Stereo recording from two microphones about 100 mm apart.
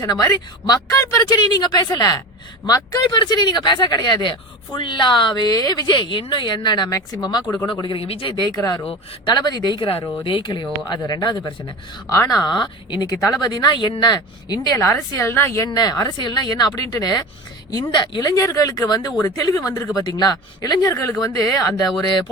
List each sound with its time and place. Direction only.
0.3 s speech: 40° left (ahead or behind)
7.7 s speech: 50° left (ahead or behind)
8.0 s speech: 65° left (ahead or behind)
9.3 s speech: 45° left (ahead or behind)
12.1 s speech: 35° left (ahead or behind)
15.2 s speech: 25° left (ahead or behind); by 18.3 s 50° left (ahead or behind)
18.3 s speech: 35° left (ahead or behind)